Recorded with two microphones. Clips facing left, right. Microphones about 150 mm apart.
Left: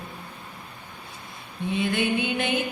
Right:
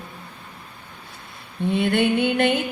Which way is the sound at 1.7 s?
60° right (ahead or behind).